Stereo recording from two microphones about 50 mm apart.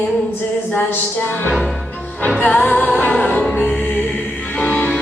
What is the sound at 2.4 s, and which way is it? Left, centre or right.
Music, left.